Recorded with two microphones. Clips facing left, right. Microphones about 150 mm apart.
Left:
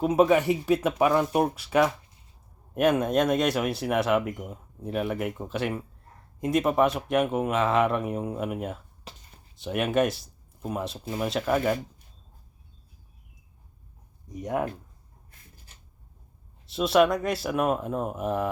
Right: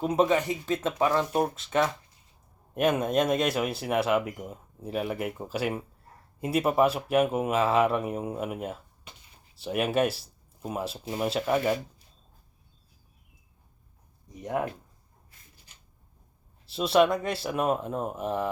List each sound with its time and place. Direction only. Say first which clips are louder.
0.0 s speech: left 3 dB; 5° left (ahead or behind)
15.5 s a sound: left 3 dB; 45° left (ahead or behind)
16.6 s speech: left 1 dB; centre (ahead or behind)